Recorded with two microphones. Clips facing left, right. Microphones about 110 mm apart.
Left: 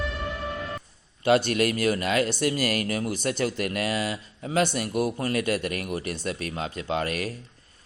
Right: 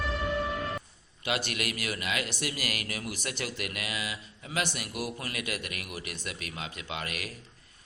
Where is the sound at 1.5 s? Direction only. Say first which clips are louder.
Left 11 dB; 35° left (ahead or behind).